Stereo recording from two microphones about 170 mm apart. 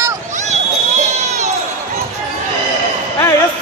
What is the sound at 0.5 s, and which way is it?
Run, 45° right (ahead or behind).